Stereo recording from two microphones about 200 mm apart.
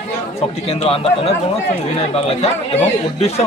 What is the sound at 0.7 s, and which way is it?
A man's voice, 30° left (ahead or behind).